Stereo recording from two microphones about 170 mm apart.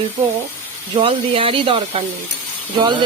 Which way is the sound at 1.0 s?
30° right (ahead or behind).